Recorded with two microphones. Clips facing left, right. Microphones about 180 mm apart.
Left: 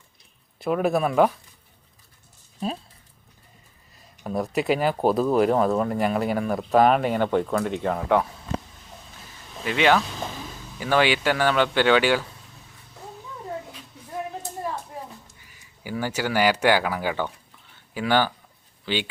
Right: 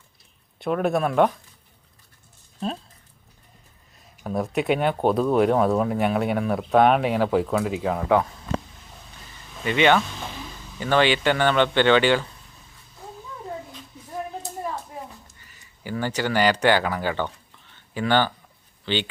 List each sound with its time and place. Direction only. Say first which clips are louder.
0.6 s speech: even; centre (ahead or behind)
4.2 s speech: even; centre (ahead or behind)
9.6 s speech: right 1 dB; centre (ahead or behind)
15.4 s speech: right 1 dB; 10° left (ahead or behind)